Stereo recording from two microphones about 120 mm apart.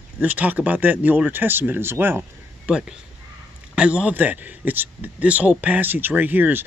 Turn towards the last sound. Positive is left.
turn(degrees=-15)  # may be behind; listen again after turning